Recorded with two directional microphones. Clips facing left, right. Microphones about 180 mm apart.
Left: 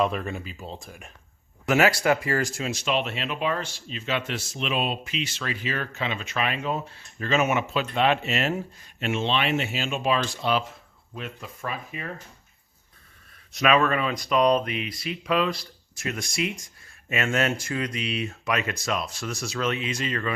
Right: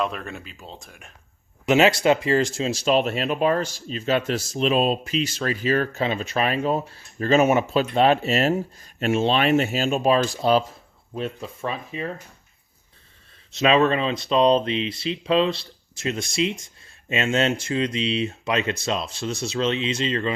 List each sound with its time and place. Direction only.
0.0 s speech: 5° left (ahead or behind)
1.6 s speech: 20° right (ahead or behind)
13.5 s speech: 25° right (ahead or behind)